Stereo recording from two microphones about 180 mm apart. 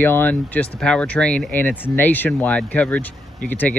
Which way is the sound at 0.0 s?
10° left (ahead or behind).